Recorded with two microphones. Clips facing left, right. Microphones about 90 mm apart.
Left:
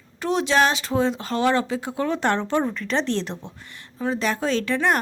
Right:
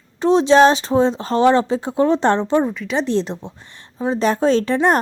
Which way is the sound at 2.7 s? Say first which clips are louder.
Right 4 dB; 5° right (ahead or behind).